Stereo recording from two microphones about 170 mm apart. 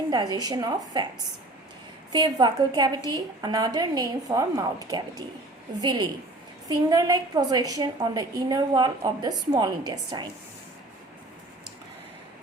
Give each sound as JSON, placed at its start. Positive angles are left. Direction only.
{"t": 0.1, "sound": "a woman's voice", "side_deg": -25}
{"t": 2.1, "sound": "a woman's voice", "side_deg": -25}